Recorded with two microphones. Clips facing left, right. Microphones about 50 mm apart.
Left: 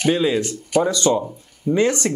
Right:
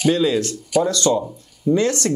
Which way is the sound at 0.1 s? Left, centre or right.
Centre.